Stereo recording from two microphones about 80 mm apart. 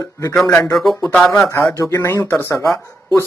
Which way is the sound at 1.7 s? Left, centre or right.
Left.